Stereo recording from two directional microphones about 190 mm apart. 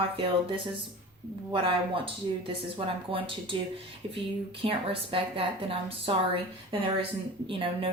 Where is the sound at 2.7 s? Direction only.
25° right (ahead or behind).